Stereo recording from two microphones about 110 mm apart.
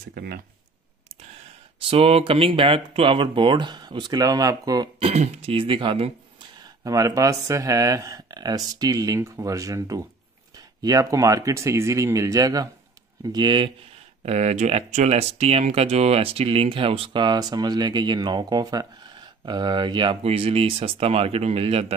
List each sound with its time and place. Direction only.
1.9 s speech: 60° right (ahead or behind); by 4.8 s 35° right (ahead or behind)
4.9 s speech: 75° right (ahead or behind); by 6.1 s 55° right (ahead or behind)
6.6 s speech: 30° right (ahead or behind)
14.2 s speech: 85° right; by 20.2 s 45° right (ahead or behind)
20.2 s speech: 65° right (ahead or behind)